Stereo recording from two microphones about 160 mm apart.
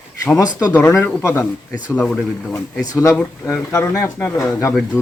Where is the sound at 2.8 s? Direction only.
20° left (ahead or behind).